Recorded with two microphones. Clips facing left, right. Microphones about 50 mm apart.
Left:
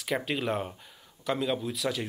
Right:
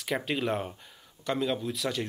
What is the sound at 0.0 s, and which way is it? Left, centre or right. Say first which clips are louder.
Speech: even; centre.